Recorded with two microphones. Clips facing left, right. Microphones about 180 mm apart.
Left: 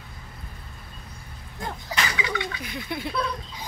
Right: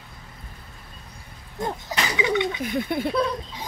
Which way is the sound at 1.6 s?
20° right (ahead or behind).